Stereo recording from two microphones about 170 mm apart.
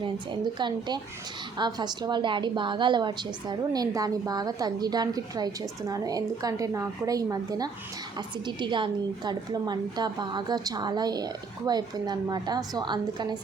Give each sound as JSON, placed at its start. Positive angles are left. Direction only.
{"t": 0.0, "sound": "a woman's voice", "side_deg": -25}